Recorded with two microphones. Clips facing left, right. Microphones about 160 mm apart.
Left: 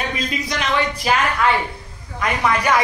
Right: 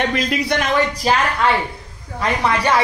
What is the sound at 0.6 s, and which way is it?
Speech, 40° right (ahead or behind).